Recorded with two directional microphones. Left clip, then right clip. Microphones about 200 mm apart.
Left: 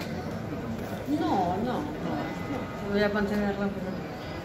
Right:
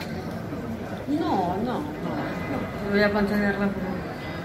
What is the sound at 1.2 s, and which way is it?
Speech, 25° right (ahead or behind).